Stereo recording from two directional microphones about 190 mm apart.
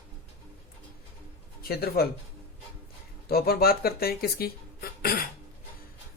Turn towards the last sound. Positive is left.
turn(degrees=50)  # may be behind; listen again after turning